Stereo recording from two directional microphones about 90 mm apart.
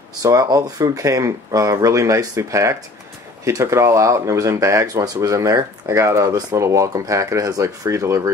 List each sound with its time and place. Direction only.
0.2 s speech: 40° right (ahead or behind)